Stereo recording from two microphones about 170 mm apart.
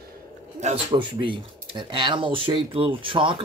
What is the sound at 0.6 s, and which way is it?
Speech, 35° right (ahead or behind).